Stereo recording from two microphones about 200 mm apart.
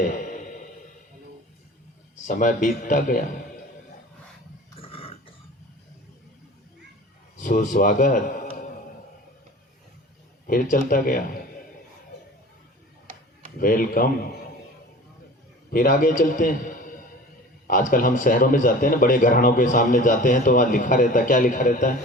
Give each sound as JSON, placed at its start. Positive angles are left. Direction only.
{"t": 0.0, "sound": "music", "side_deg": 40}
{"t": 2.2, "sound": "a man's voice", "side_deg": 40}
{"t": 4.8, "sound": "dog", "side_deg": 30}
{"t": 7.3, "sound": "a man's voice", "side_deg": 40}
{"t": 10.4, "sound": "a man's voice", "side_deg": 45}
{"t": 13.6, "sound": "a man's voice", "side_deg": 45}
{"t": 15.7, "sound": "a man's voice", "side_deg": 45}